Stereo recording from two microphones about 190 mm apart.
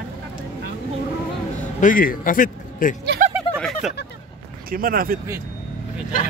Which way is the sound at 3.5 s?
30° left (ahead or behind).